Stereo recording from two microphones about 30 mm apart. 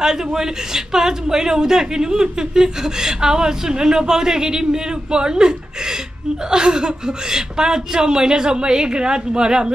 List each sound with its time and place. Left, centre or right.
0.0 s speech: centre